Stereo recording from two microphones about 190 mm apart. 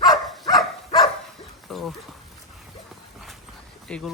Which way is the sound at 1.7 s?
Centre (ahead or behind).